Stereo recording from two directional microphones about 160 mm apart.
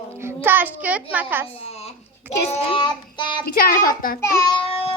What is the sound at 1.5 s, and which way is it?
Child singing, 40° left (ahead or behind).